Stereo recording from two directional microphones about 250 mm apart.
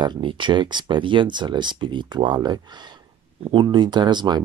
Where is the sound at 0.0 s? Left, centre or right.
Centre.